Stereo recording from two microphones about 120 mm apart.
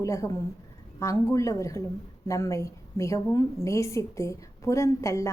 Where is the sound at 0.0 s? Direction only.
25° left (ahead or behind).